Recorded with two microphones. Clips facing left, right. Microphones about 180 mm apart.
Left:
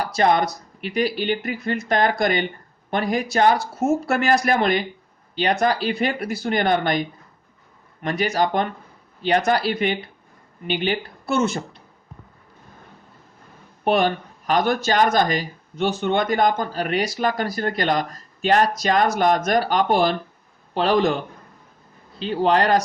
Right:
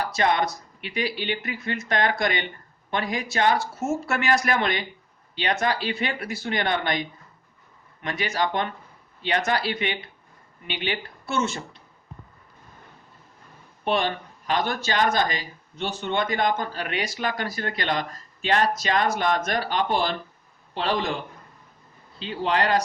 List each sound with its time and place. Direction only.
0.0 s speech: 40° left (ahead or behind)
13.8 s speech: 45° left (ahead or behind)
22.3 s speech: 50° left (ahead or behind)